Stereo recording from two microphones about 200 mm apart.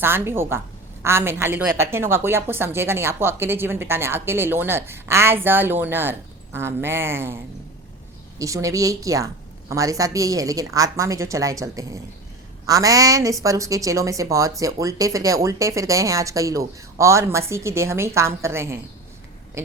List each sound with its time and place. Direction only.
0.0 s a woman's voice: 10° right (ahead or behind)
8.4 s a woman's voice: 15° right (ahead or behind)